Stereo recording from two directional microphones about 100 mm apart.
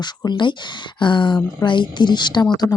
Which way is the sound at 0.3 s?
50° left (ahead or behind).